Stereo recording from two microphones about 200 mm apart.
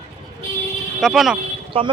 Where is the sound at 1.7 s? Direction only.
25° right (ahead or behind).